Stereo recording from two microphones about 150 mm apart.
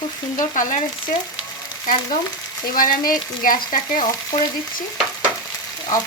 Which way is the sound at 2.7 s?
70° left (ahead or behind).